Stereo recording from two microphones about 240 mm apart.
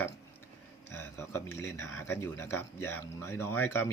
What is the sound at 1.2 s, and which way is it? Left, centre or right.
Speech, centre.